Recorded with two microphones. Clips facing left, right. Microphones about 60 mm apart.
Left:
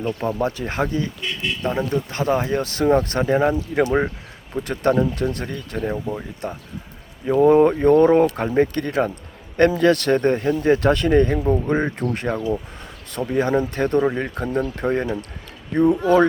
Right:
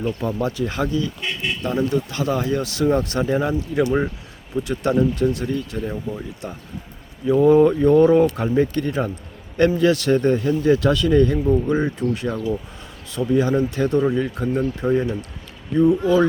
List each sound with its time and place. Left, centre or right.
0.2 s speech: left
3.3 s speech: left
4.5 s speech: left
5.9 s speech: left
6.4 s speech: left